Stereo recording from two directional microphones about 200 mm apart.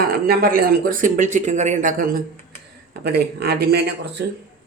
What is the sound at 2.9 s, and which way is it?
Speech, 55° right (ahead or behind).